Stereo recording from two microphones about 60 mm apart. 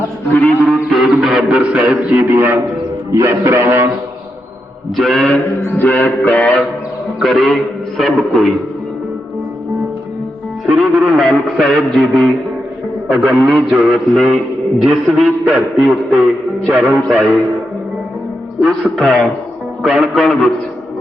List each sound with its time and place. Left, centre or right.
0.3 s a man's voice: left
0.7 s a man's voice: centre
1.5 s a man's voice: centre
2.2 s a man's voice: right
3.1 s a man's voice: right
3.5 s a man's voice: right
4.9 s a man's voice: centre
5.6 s speech: left
6.1 s mantra: centre
7.2 s a man's voice: centre
10.7 s a man's voice: centre
14.2 s music: centre
14.8 s a man's voice: centre
18.6 s a man's voice: centre